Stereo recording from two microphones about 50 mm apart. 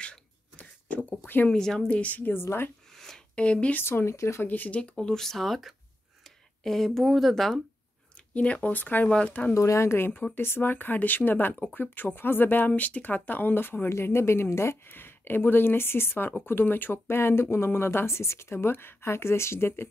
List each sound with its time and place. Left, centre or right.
0.0 s a sound: left
1.5 s a woman's voice: centre
1.9 s speech: left
2.4 s speech: left
3.4 s speech: left
3.7 s speech: left
4.1 s speech: left
4.5 s speech: left
5.0 s speech: centre
8.4 s speech: left
9.5 s speech: left
10.3 s speech: left
13.8 s speech: left
15.0 s speech: left